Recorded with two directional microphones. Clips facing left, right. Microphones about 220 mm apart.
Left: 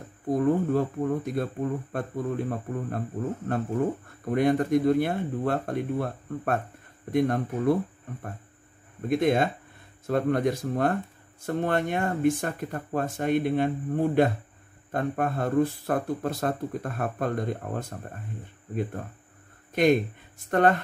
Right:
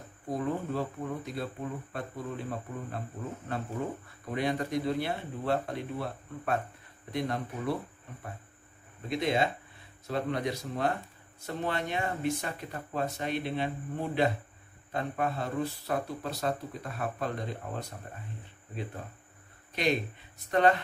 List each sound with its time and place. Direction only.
0.3 s speech: 50° left (ahead or behind)
4.2 s speech: 50° left (ahead or behind)
9.1 s speech: 50° left (ahead or behind)
19.7 s speech: 50° left (ahead or behind)